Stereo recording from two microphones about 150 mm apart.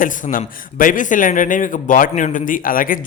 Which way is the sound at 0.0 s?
60° left (ahead or behind).